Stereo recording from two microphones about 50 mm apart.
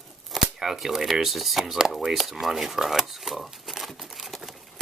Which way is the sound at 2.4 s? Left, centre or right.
Centre.